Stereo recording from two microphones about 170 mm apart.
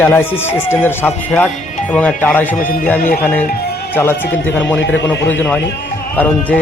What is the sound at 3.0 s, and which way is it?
Speech, 55° left (ahead or behind).